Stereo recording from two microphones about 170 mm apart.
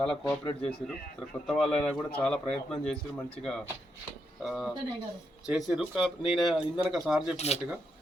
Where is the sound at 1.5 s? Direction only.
5° left (ahead or behind).